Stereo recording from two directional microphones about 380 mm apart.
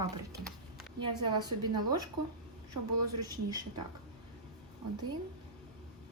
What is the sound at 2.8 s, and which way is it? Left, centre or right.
Speech, right.